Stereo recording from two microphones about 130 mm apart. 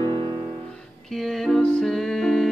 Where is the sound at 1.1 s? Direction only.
Centre (ahead or behind).